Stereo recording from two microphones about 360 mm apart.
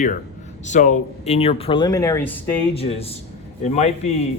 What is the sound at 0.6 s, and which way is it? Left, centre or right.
Speech, centre.